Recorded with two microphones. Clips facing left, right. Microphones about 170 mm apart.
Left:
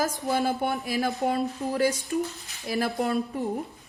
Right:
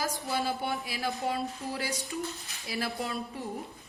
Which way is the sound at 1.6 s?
60° left (ahead or behind).